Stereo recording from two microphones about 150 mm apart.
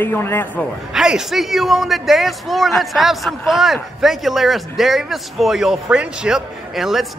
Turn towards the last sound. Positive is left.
turn(degrees=0)  # may be behind; listen again after turning